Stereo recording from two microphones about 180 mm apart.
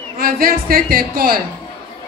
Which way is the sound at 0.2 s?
55° right (ahead or behind).